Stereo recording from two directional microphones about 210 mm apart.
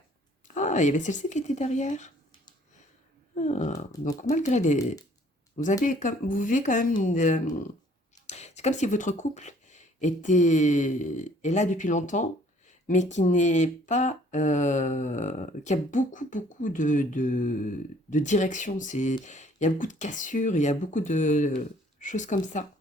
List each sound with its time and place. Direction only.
0.4 s speech: 35° left (ahead or behind)
3.3 s speech: 35° left (ahead or behind)